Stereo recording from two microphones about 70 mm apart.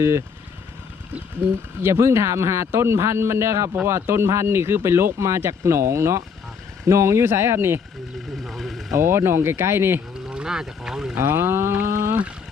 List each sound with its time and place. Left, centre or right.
0.0 s speech: right
1.8 s speech: right
8.4 s speech: centre
8.9 s speech: right
10.2 s speech: centre
11.2 s boat: right